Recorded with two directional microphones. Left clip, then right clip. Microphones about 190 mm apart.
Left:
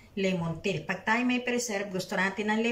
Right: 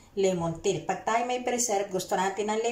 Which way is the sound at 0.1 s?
30° right (ahead or behind).